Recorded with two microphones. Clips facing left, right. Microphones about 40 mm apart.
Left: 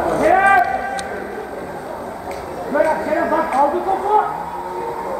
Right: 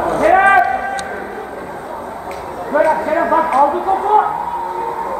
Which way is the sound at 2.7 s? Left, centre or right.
Right.